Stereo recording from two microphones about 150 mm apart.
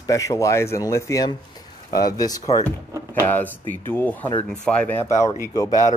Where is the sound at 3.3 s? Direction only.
15° left (ahead or behind).